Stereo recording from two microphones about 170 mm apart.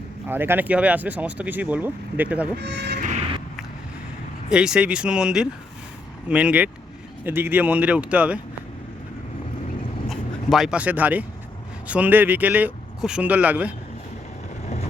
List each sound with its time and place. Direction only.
0.3 s speech: 10° right (ahead or behind)
2.6 s speech: 90° right
4.4 s speech: 5° right (ahead or behind)
10.1 s speech: centre (ahead or behind)